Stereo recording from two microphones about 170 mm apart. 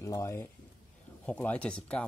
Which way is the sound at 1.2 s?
5° left (ahead or behind).